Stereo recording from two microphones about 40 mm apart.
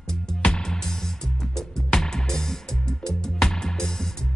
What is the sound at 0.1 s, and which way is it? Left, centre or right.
Music, left.